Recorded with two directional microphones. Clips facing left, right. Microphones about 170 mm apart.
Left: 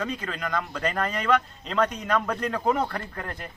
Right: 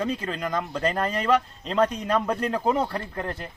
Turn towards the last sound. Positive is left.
turn(degrees=-25)  # may be behind; listen again after turning